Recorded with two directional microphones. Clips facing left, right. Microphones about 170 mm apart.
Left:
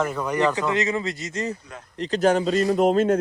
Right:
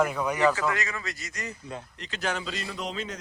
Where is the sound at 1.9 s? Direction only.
40° left (ahead or behind).